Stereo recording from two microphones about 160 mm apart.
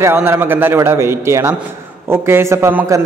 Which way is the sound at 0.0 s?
15° right (ahead or behind).